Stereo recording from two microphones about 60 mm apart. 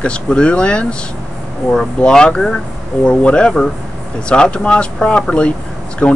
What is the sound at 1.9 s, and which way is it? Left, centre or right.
Speech, centre.